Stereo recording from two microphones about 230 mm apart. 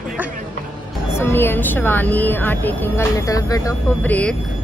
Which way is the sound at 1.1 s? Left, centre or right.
Centre.